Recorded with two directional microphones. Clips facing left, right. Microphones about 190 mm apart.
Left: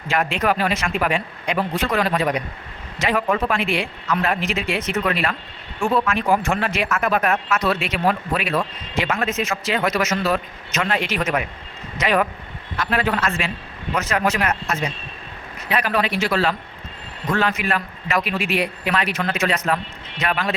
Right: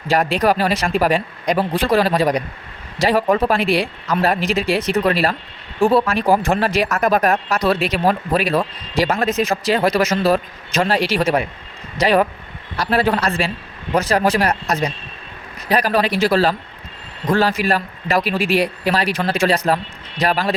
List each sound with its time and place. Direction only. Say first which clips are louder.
0.1 s speech: right 4 dB; 35° right (ahead or behind)